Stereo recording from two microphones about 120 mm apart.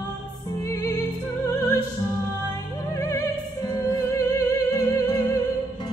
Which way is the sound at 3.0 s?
30° left (ahead or behind).